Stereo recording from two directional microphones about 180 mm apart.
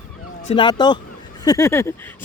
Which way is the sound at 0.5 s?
25° left (ahead or behind).